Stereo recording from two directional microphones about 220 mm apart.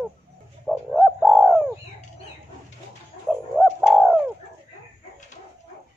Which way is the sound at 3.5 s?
Centre (ahead or behind).